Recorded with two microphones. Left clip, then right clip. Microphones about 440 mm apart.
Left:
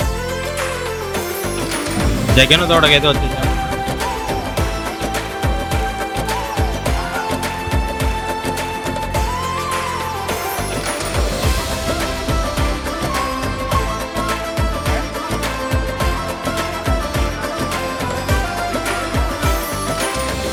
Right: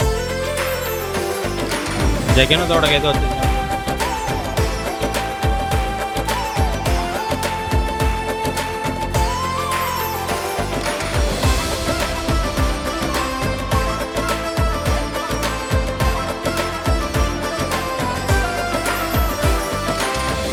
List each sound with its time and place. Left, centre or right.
2.3 s speech: right